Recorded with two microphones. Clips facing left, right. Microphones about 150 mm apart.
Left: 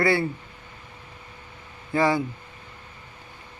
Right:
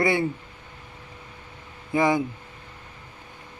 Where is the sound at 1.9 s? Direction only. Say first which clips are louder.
Even; 20° right (ahead or behind).